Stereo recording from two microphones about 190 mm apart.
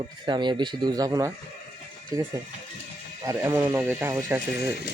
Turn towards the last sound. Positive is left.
turn(degrees=-10)  # may be behind; listen again after turning